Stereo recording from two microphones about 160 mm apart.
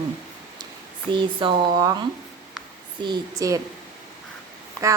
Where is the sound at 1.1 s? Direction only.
30° right (ahead or behind).